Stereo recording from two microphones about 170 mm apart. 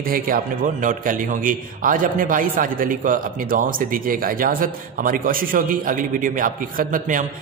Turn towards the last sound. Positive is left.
turn(degrees=-50)  # may be behind; listen again after turning